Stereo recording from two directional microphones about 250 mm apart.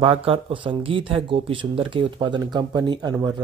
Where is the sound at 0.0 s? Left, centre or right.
Right.